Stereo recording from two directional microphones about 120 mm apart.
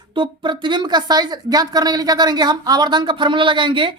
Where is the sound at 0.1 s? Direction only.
40° right (ahead or behind).